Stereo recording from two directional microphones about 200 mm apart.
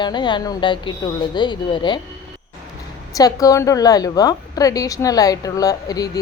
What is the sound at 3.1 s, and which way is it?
A woman's voice, 15° left (ahead or behind).